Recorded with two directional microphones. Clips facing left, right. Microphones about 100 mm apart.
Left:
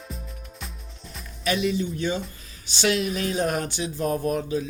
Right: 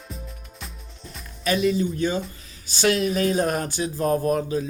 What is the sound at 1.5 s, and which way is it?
Speech, 40° right (ahead or behind).